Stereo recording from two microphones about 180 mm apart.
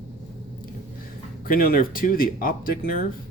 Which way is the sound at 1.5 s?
55° left (ahead or behind).